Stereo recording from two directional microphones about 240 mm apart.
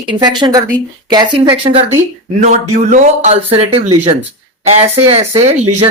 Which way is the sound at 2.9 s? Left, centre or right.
Right.